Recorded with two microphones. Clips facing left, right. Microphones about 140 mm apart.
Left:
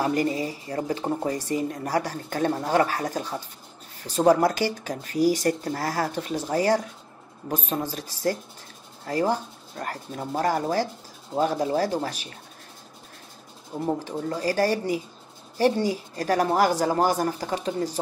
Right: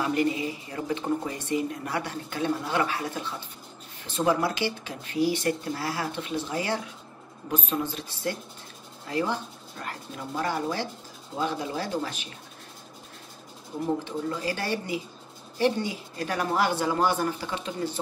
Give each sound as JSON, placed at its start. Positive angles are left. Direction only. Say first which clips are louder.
{"t": 0.0, "sound": "speech", "louder": "left 2 dB", "side_deg": 40}
{"t": 13.7, "sound": "speech", "louder": "left 1 dB", "side_deg": 35}